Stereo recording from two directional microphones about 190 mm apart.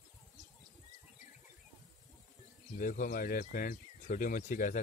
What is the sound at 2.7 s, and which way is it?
Speech, 45° left (ahead or behind).